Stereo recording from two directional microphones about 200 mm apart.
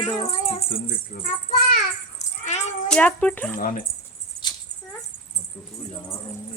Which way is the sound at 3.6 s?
45° left (ahead or behind).